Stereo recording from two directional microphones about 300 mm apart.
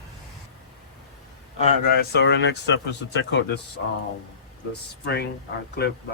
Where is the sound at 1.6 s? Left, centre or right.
Left.